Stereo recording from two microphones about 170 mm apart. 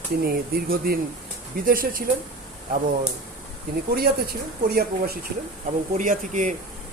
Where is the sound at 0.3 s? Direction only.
60° right (ahead or behind).